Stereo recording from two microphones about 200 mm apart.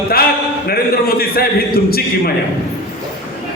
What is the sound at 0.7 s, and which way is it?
A man's voice, 50° left (ahead or behind).